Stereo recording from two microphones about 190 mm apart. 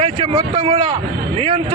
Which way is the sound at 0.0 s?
30° right (ahead or behind).